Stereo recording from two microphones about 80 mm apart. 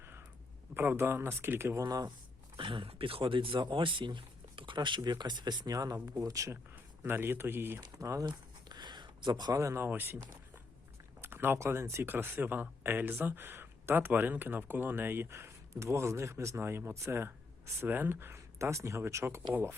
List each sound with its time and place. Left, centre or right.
0.0 s a sound: right
0.7 s speech: right
1.8 s speech: right
2.6 s speech: right
6.7 s a man's voice: right
7.8 s speech: right
8.3 s a sound: right
11.2 s speech: right